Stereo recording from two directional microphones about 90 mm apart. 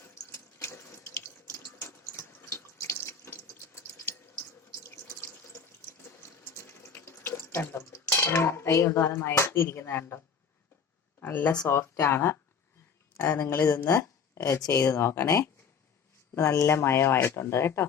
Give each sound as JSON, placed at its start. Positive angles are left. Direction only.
{"t": 0.6, "sound": "water tap", "side_deg": 30}
{"t": 11.2, "sound": "speech", "side_deg": 20}
{"t": 11.7, "sound": "speech", "side_deg": 30}
{"t": 14.9, "sound": "speech", "side_deg": 30}